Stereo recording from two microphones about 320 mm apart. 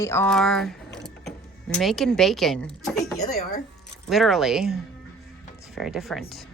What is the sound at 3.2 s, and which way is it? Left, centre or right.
Speech, left.